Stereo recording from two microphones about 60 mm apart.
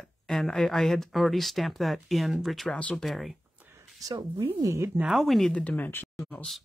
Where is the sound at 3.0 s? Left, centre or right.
Centre.